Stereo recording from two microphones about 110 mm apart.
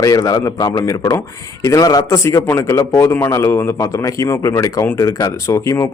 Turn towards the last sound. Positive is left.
turn(degrees=25)  # may be behind; listen again after turning